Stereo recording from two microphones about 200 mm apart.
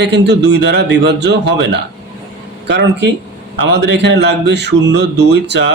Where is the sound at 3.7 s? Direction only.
60° right (ahead or behind).